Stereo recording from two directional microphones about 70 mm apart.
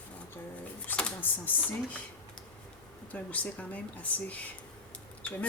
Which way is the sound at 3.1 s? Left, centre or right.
Left.